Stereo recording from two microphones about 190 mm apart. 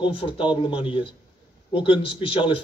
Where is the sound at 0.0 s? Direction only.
25° left (ahead or behind).